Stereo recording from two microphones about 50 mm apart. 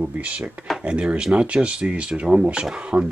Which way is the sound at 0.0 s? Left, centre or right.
Right.